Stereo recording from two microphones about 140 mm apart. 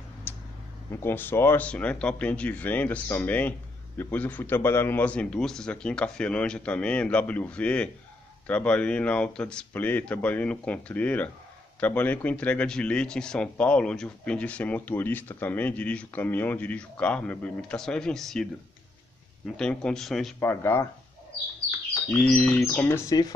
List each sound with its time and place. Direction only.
0.3 s a sound: 15° left (ahead or behind)
1.0 s speech: 15° left (ahead or behind)
20.3 s speech: 15° left (ahead or behind)
22.1 s speech: 10° left (ahead or behind)